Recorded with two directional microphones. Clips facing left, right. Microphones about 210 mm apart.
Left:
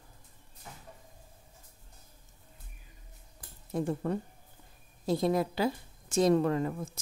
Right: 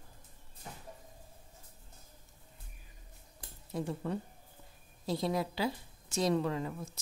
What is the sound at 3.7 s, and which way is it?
A woman's voice, 50° left (ahead or behind).